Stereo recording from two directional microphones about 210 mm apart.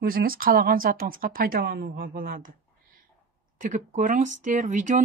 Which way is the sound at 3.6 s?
35° right (ahead or behind).